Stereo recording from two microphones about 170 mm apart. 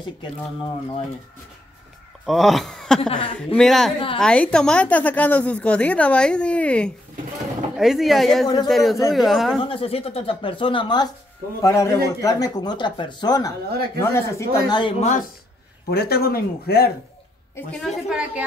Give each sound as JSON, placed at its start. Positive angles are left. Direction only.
{"t": 0.2, "sound": "speech", "side_deg": 30}
{"t": 2.2, "sound": "speech", "side_deg": 0}
{"t": 3.0, "sound": "speech", "side_deg": 30}
{"t": 3.5, "sound": "a woman's voice", "side_deg": 0}
{"t": 9.6, "sound": "speech", "side_deg": 35}
{"t": 11.6, "sound": "a woman's voice", "side_deg": 15}
{"t": 14.8, "sound": "speech", "side_deg": 30}
{"t": 15.9, "sound": "speech", "side_deg": 65}
{"t": 17.6, "sound": "a woman's voice", "side_deg": 5}